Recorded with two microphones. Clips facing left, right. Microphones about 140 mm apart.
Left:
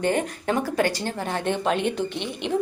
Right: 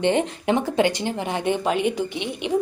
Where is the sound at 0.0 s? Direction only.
20° right (ahead or behind).